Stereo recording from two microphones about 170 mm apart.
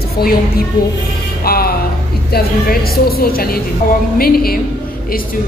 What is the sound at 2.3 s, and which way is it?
A woman's voice, 65° left (ahead or behind).